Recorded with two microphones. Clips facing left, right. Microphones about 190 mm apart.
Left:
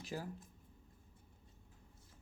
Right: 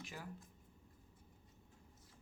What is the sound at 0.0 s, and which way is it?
Speech, 35° left (ahead or behind).